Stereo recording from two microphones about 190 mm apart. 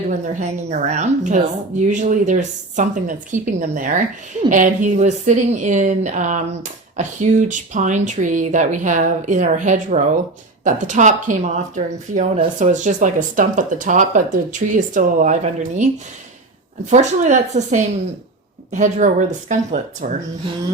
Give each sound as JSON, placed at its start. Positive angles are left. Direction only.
{"t": 0.1, "sound": "a woman's voice", "side_deg": -35}
{"t": 16.9, "sound": "a woman's voice", "side_deg": -40}